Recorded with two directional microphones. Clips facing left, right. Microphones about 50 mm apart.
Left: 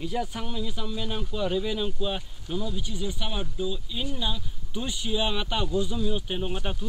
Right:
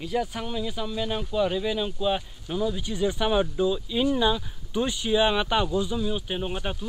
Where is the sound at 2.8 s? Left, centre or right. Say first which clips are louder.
Right 8 dB; right.